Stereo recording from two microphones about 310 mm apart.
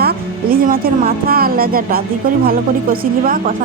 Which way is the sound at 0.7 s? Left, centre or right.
Right.